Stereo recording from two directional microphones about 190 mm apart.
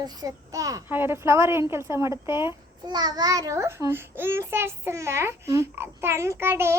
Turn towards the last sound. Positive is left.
turn(degrees=-15)  # may be behind; listen again after turning